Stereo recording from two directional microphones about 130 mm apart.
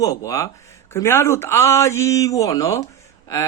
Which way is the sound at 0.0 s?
25° left (ahead or behind).